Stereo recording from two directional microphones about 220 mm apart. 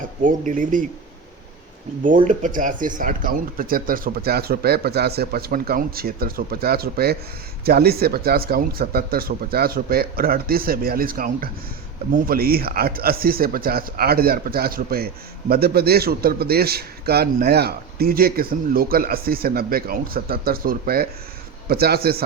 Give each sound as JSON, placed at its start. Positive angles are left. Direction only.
{"t": 0.2, "sound": "speech", "side_deg": -35}
{"t": 2.2, "sound": "speech", "side_deg": -35}